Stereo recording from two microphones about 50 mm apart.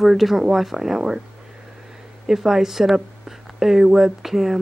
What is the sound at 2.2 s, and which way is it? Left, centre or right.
Speech, centre.